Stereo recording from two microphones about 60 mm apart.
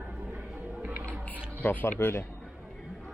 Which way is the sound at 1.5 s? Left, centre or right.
Left.